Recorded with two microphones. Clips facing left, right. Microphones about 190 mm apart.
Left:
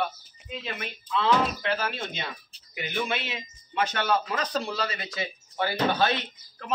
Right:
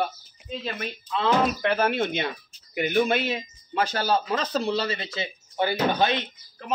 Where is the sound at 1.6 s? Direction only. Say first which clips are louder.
Right 7 dB; 60° right (ahead or behind).